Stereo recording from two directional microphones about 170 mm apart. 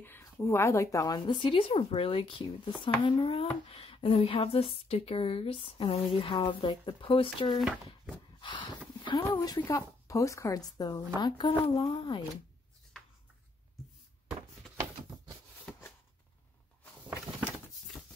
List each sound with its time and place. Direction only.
0.0 s speech: 15° left (ahead or behind); by 7.6 s 30° left (ahead or behind)
7.6 s speech: 5° right (ahead or behind)
8.4 s a sound: 30° left (ahead or behind)
9.6 s a woman's voice: 20° left (ahead or behind)
15.7 s shuffling cards: 10° left (ahead or behind)